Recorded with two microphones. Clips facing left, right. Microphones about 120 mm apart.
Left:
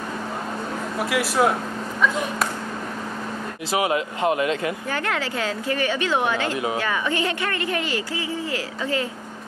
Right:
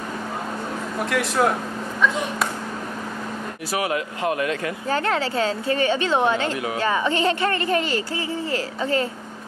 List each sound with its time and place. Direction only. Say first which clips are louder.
0.9 s speech: even; 5° left (ahead or behind)
3.7 s speech: left 2 dB; 20° left (ahead or behind)
4.8 s a woman's voice: right 3 dB; 30° right (ahead or behind)